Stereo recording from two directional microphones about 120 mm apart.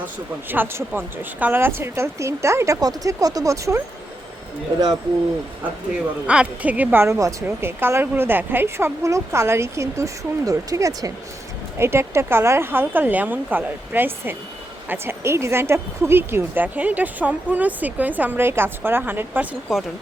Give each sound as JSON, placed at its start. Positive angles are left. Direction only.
{"t": 0.5, "sound": "a woman's voice", "side_deg": -15}
{"t": 6.2, "sound": "a woman's voice", "side_deg": -10}
{"t": 19.7, "sound": "speech", "side_deg": -5}